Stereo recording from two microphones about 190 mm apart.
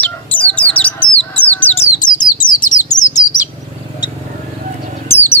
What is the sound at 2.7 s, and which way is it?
Chirp, 40° left (ahead or behind).